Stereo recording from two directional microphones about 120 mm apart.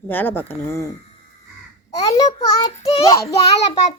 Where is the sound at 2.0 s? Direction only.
30° left (ahead or behind).